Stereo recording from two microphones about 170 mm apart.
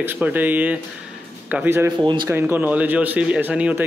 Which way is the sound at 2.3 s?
10° right (ahead or behind).